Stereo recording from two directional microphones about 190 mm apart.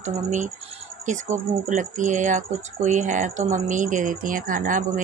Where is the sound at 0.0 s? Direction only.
40° right (ahead or behind).